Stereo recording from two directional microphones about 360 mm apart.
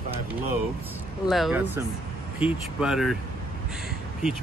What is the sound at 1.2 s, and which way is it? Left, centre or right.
Speech, centre.